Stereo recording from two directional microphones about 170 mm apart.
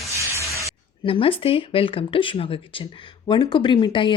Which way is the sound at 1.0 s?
30° left (ahead or behind).